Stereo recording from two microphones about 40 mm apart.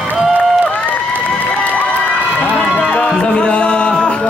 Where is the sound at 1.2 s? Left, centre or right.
Left.